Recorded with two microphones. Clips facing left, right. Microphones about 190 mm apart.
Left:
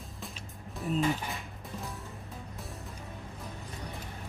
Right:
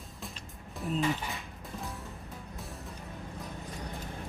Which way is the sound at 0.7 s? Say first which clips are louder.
Left 1 dB; centre (ahead or behind).